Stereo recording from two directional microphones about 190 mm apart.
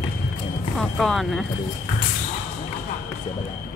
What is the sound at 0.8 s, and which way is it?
Speech, centre (ahead or behind).